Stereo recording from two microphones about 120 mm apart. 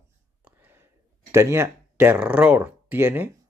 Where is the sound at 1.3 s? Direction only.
25° right (ahead or behind).